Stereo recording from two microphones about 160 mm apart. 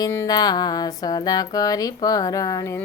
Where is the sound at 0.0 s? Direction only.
20° left (ahead or behind).